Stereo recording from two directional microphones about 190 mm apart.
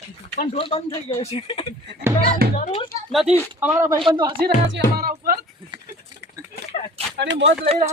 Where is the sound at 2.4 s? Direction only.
55° right (ahead or behind).